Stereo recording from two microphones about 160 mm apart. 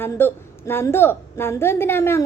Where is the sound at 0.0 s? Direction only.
15° left (ahead or behind).